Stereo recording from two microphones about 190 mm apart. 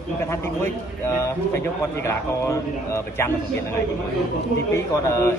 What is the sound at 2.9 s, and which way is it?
Speech, 15° left (ahead or behind).